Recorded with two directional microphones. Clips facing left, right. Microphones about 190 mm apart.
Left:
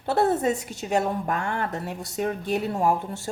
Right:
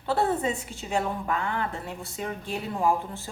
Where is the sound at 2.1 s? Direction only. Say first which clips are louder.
Left 8 dB; 65° left (ahead or behind).